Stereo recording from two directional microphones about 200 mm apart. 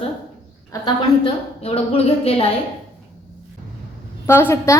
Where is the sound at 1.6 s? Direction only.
30° left (ahead or behind).